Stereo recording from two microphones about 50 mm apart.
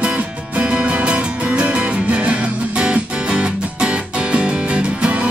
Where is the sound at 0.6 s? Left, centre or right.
Centre.